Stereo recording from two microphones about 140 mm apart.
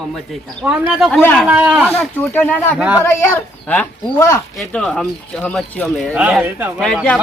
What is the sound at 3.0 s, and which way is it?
A man's voice, 15° left (ahead or behind).